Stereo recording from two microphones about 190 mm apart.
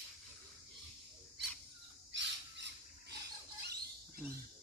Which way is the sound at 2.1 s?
70° right (ahead or behind).